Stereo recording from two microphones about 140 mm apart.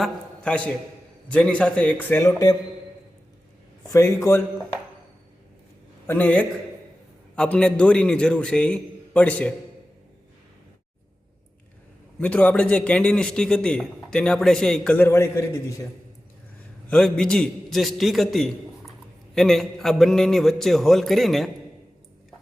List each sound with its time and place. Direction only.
0.0 s a man's voice: 10° left (ahead or behind)
3.8 s a man's voice: 20° left (ahead or behind)
6.1 s a man's voice: 10° left (ahead or behind)
12.2 s a man's voice: 10° left (ahead or behind)
15.0 s a man's voice: 20° left (ahead or behind)
16.9 s a man's voice: 5° left (ahead or behind)